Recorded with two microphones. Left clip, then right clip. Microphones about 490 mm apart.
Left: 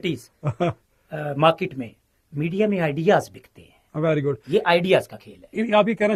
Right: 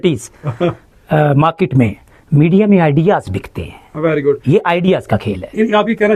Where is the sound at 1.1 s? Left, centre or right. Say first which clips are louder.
Right 7 dB; right.